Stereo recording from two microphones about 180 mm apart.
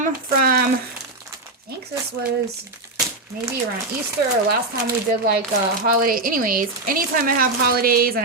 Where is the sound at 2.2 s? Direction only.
65° right (ahead or behind).